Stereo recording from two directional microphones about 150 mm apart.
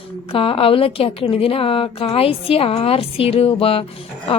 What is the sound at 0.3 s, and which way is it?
A woman's voice, 40° left (ahead or behind).